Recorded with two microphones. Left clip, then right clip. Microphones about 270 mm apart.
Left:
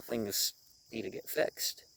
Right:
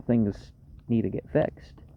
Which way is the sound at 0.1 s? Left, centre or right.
Left.